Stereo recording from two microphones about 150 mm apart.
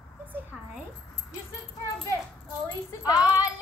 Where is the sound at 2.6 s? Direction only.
25° left (ahead or behind).